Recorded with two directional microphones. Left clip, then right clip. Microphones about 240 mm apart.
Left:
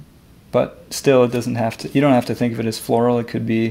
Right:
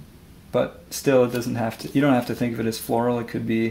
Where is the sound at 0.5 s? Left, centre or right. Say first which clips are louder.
Left 5 dB; left.